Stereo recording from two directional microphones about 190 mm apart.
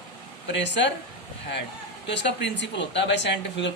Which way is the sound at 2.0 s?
65° left (ahead or behind).